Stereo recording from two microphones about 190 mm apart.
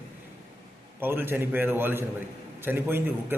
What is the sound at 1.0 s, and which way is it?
A man's voice, 10° right (ahead or behind).